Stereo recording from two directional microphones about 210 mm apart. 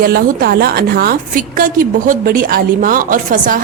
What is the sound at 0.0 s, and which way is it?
A woman's voice, 45° right (ahead or behind).